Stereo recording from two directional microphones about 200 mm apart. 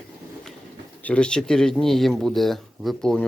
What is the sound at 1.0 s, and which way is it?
Speech, 5° left (ahead or behind).